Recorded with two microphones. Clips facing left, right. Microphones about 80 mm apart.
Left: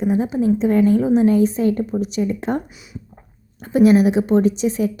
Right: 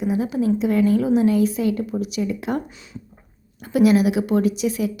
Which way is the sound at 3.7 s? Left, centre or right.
Left.